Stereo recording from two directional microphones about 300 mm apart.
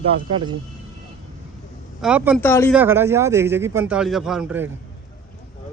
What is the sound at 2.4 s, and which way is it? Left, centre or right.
Speech, centre.